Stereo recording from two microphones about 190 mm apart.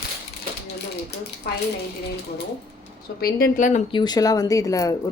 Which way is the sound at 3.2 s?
50° left (ahead or behind).